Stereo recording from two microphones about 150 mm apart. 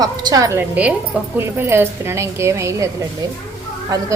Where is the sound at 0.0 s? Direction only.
25° right (ahead or behind).